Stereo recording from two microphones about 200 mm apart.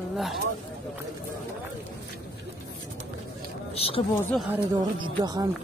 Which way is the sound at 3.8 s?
30° left (ahead or behind).